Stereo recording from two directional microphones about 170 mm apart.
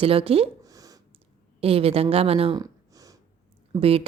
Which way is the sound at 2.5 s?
20° right (ahead or behind).